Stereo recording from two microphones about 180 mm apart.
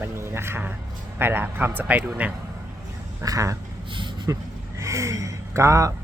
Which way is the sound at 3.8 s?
25° right (ahead or behind).